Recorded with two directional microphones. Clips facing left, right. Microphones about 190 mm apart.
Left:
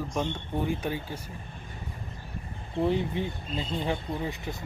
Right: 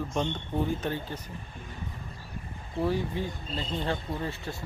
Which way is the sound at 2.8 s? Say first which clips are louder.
Left 2 dB; 20° left (ahead or behind).